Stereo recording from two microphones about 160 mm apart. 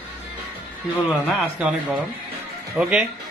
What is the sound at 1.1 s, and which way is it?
Speech, centre (ahead or behind).